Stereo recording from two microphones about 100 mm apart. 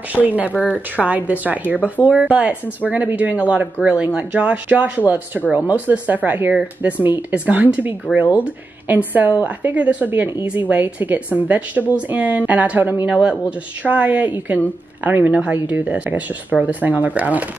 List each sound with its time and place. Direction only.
0.1 s speech: 15° right (ahead or behind)